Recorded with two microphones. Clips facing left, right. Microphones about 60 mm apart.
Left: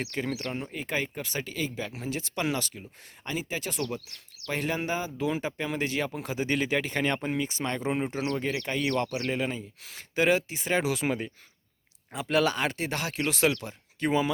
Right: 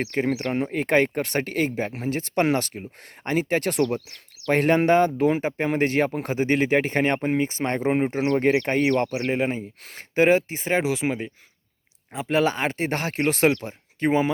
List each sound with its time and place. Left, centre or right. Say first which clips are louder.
0.0 s speech: right 7 dB; right
0.5 s speech: right 11 dB; right